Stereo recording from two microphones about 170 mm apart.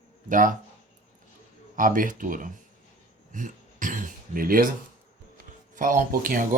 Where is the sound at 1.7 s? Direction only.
50° right (ahead or behind).